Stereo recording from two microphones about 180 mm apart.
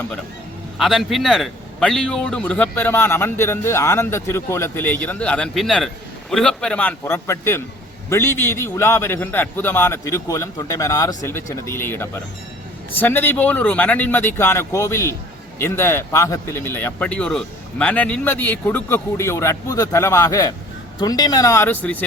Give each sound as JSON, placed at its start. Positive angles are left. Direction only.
{"t": 0.8, "sound": "a man's voice", "side_deg": 0}